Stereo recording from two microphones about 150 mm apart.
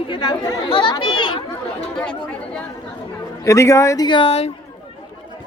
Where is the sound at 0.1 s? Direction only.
30° left (ahead or behind).